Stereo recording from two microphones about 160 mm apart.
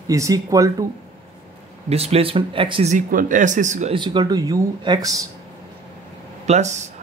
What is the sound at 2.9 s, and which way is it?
Speech, 55° right (ahead or behind).